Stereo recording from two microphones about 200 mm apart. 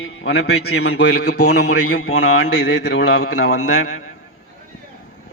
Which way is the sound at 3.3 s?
90° left.